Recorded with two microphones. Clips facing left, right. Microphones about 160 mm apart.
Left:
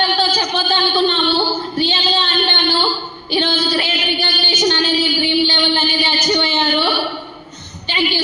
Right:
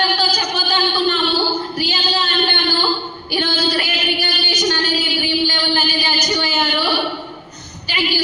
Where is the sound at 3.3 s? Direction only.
25° left (ahead or behind).